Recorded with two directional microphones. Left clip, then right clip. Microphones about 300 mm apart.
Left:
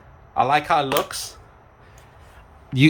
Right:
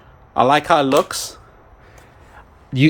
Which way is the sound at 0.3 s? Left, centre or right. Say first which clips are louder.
Right 4 dB; right.